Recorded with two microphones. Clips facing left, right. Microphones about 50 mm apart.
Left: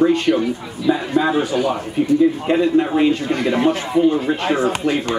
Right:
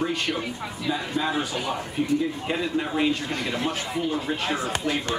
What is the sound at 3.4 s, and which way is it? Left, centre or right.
Speech, left.